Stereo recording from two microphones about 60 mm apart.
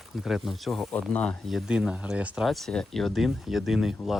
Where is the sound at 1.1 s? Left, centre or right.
Left.